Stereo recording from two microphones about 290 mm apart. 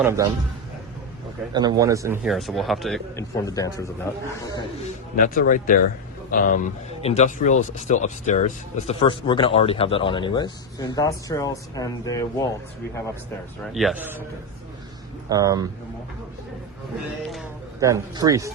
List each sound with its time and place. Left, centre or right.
0.0 s speech: centre
1.5 s speech: centre
3.3 s a man's voice: centre
5.1 s a man's voice: left; by 12.5 s centre
13.7 s speech: centre
15.3 s speech: centre
17.7 s speech: centre